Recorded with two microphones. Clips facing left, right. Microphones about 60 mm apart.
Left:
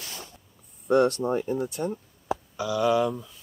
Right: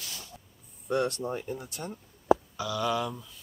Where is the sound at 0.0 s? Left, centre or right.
Left.